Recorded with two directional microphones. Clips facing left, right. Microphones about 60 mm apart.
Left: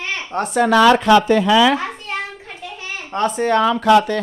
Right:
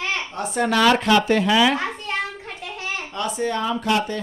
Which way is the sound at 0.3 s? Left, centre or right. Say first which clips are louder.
Left 6 dB; left.